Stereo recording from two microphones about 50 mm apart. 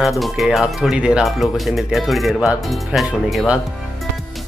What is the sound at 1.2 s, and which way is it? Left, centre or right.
Speech, centre.